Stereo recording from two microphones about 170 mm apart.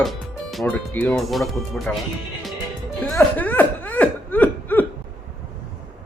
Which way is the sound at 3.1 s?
10° left (ahead or behind).